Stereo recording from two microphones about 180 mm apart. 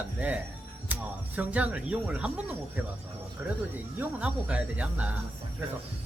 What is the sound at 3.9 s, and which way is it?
Speech, 5° right (ahead or behind).